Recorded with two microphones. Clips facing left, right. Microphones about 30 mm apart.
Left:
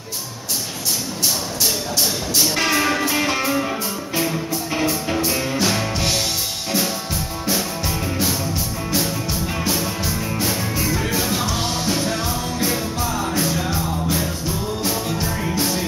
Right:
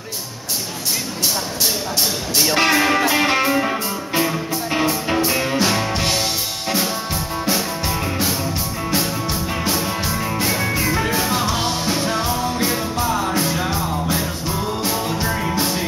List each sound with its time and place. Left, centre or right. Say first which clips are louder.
2.4 s music: right 4 dB; right; by 6.2 s centre
10.0 s music: right 2 dB; centre
11.5 s music: right 2 dB; right
12.0 s music: right 3 dB; right
15.4 s music: right 1 dB; centre